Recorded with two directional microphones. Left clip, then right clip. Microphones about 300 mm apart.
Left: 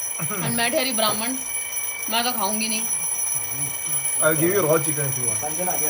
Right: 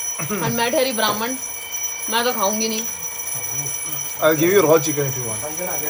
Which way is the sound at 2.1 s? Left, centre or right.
Centre.